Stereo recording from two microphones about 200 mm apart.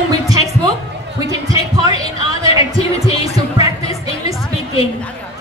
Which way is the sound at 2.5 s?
30° left (ahead or behind).